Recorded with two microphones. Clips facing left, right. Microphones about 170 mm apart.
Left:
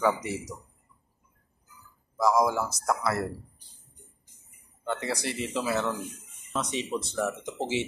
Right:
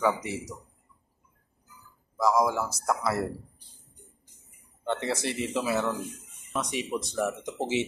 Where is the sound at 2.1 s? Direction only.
Centre (ahead or behind).